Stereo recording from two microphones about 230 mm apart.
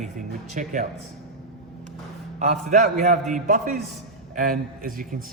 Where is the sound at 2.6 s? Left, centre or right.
Right.